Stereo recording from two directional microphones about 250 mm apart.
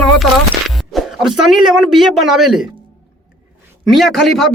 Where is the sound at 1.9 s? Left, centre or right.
Centre.